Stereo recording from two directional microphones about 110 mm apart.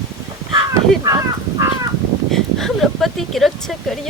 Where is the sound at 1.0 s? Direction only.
35° right (ahead or behind).